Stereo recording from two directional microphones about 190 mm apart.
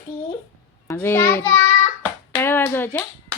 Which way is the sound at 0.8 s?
10° left (ahead or behind).